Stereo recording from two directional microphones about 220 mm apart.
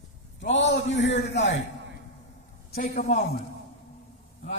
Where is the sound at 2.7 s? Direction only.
45° left (ahead or behind).